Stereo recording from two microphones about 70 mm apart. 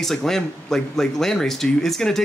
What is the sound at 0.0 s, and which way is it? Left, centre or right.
Speech, centre.